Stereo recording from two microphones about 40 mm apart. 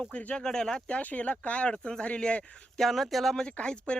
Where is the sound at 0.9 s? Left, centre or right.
Left.